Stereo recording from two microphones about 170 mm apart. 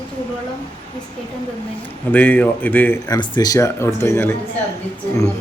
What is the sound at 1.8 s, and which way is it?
A man's voice, 10° left (ahead or behind).